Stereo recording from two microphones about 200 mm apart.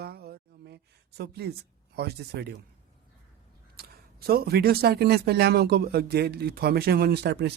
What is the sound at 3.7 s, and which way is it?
Speech, 50° right (ahead or behind).